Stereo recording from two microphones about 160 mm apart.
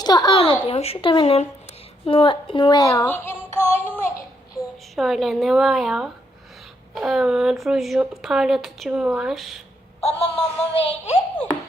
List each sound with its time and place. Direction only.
0.0 s a child's voice: 25° left (ahead or behind)
0.6 s synthetic singing: 40° left (ahead or behind)
3.1 s child singing: 15° left (ahead or behind)
3.6 s music: 10° right (ahead or behind)
4.9 s speech: centre (ahead or behind)
10.0 s synthetic singing: 40° left (ahead or behind)